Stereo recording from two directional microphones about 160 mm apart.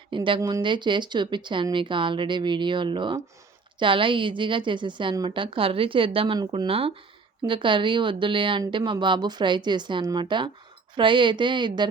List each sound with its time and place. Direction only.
0.3 s a woman's voice: 25° right (ahead or behind)